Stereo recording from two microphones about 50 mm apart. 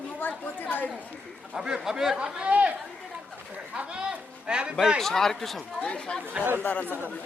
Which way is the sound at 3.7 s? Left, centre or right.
Centre.